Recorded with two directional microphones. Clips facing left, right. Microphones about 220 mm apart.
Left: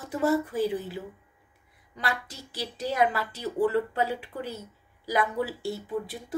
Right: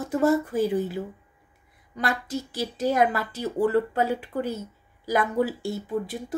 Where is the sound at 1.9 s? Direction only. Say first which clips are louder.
Right 6 dB; 45° right (ahead or behind).